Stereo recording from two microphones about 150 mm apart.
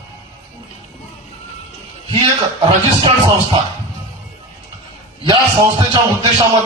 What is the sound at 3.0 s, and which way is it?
Speech, 35° right (ahead or behind).